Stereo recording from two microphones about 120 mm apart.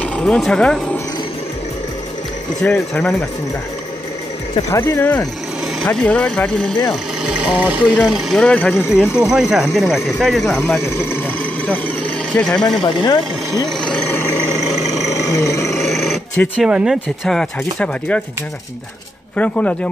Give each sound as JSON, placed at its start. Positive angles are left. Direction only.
{"t": 0.0, "sound": "speech", "side_deg": 5}
{"t": 2.6, "sound": "speech", "side_deg": 10}
{"t": 4.6, "sound": "speech", "side_deg": 25}
{"t": 6.9, "sound": "speech", "side_deg": -5}
{"t": 9.1, "sound": "speech", "side_deg": -5}
{"t": 10.8, "sound": "speech", "side_deg": 20}
{"t": 12.4, "sound": "speech", "side_deg": 5}
{"t": 12.8, "sound": "speech", "side_deg": 40}
{"t": 13.7, "sound": "a sound", "side_deg": 5}
{"t": 15.0, "sound": "a sound", "side_deg": 25}
{"t": 15.7, "sound": "a sound", "side_deg": 0}
{"t": 16.5, "sound": "speech", "side_deg": -5}
{"t": 19.3, "sound": "speech", "side_deg": 10}